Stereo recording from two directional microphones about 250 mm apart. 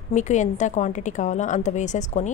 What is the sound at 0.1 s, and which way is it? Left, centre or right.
A woman's voice, left.